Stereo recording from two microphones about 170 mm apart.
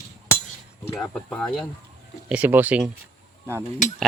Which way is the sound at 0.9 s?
10° left (ahead or behind).